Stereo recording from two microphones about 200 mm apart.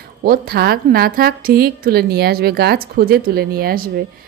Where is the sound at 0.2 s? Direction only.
50° right (ahead or behind).